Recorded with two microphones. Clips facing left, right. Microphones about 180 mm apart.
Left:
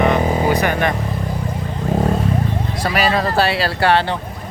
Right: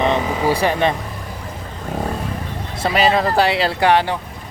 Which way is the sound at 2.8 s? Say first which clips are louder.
Right 2 dB; 20° right (ahead or behind).